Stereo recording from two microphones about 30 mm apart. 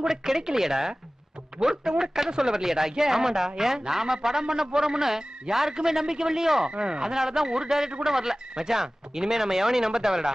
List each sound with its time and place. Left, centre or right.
0.1 s speech: centre